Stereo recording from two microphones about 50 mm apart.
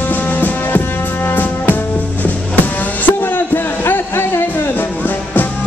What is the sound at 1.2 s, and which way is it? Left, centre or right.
Music, left.